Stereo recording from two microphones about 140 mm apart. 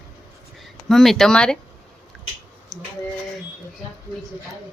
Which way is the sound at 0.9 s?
Centre (ahead or behind).